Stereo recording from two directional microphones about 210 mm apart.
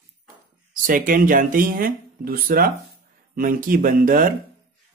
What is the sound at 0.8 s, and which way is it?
Speech, 40° right (ahead or behind).